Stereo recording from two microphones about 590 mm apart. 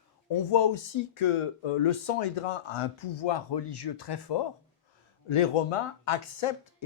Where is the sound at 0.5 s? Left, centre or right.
Left.